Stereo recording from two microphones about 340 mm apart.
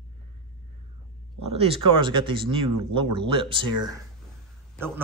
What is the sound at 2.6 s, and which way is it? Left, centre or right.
Speech, right.